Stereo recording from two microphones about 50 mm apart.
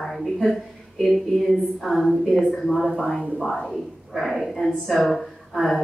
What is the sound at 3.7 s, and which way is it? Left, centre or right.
Speech, centre.